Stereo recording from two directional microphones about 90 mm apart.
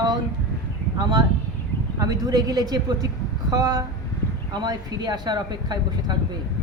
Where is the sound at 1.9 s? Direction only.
45° right (ahead or behind).